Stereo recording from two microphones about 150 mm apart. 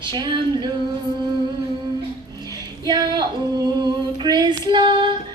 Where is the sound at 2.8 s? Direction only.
25° right (ahead or behind).